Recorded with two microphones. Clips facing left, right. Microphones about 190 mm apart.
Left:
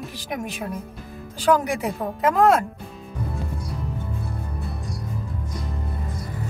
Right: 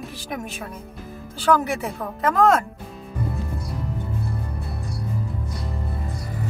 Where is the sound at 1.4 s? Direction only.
15° left (ahead or behind).